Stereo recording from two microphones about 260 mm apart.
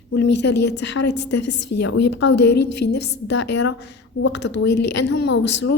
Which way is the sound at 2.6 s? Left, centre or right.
Left.